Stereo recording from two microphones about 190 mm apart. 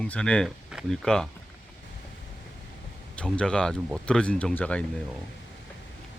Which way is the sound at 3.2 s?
5° left (ahead or behind).